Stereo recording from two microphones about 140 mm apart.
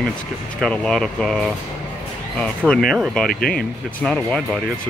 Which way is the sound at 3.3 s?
90° left.